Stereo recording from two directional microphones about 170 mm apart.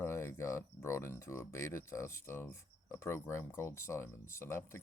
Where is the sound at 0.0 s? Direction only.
15° left (ahead or behind).